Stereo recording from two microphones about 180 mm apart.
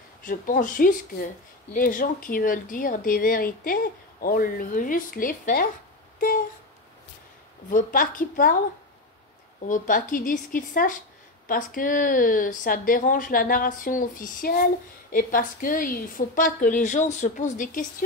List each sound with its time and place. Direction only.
0.2 s a woman's voice: 50° left (ahead or behind)
6.1 s a sound: 50° left (ahead or behind)
7.7 s a woman's voice: 50° left (ahead or behind)
9.7 s a woman's voice: 50° left (ahead or behind)